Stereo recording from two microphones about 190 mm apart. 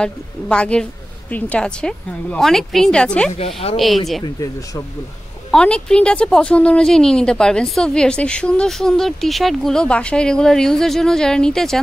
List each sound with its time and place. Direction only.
0.0 s a woman's voice: 5° left (ahead or behind)
3.3 s speech: 30° left (ahead or behind)
3.7 s a woman's voice: centre (ahead or behind)
4.2 s speech: 15° left (ahead or behind)
5.5 s a woman's voice: 5° left (ahead or behind)